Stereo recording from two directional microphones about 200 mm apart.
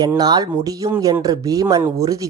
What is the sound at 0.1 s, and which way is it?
Speech, 20° right (ahead or behind).